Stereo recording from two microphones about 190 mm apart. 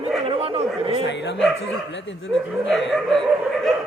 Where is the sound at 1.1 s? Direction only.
65° left (ahead or behind).